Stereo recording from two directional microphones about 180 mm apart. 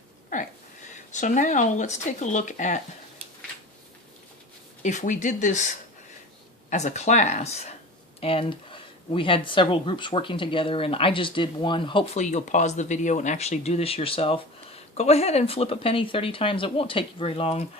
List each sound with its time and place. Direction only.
0.3 s a sound: 45° left (ahead or behind)
1.1 s speech: 45° left (ahead or behind)
4.8 s speech: 40° left (ahead or behind); by 12.0 s 25° left (ahead or behind)
12.1 s speech: 40° left (ahead or behind)